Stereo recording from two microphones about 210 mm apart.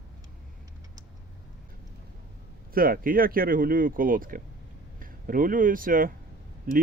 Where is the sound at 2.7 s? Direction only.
45° right (ahead or behind).